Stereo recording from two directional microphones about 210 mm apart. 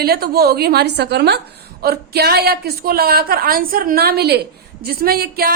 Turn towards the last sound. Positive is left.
turn(degrees=-45)  # may be behind; listen again after turning